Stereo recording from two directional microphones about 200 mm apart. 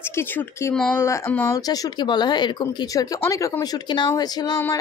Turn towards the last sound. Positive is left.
turn(degrees=15)  # may be behind; listen again after turning